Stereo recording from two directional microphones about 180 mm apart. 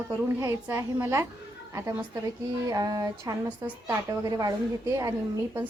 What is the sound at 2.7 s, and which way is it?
Speech, 20° right (ahead or behind).